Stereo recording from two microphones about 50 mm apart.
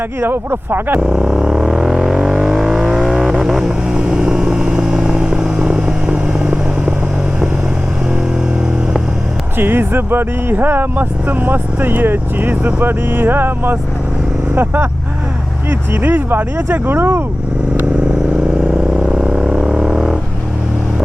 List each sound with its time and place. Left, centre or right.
0.2 s speech: right
0.9 s vehicle: centre
9.6 s speech: right
19.0 s didgeridoo: centre